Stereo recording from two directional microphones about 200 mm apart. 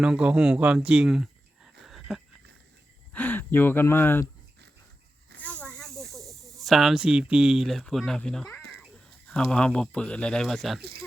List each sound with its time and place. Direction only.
0.0 s speech: 5° right (ahead or behind)
1.8 s a sound: centre (ahead or behind)
3.1 s speech: 10° left (ahead or behind)
5.4 s snake: 5° left (ahead or behind)
9.2 s speech: 5° left (ahead or behind)
10.8 s speech: 55° right (ahead or behind)